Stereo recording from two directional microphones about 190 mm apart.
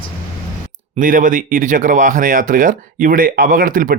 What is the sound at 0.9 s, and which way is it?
Speech, 45° right (ahead or behind).